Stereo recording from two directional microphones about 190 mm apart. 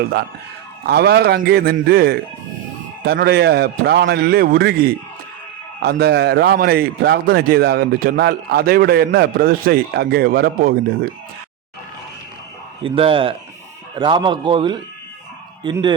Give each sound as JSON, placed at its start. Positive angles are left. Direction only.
{"t": 0.9, "sound": "a man's voice", "side_deg": -60}
{"t": 12.8, "sound": "speech", "side_deg": -30}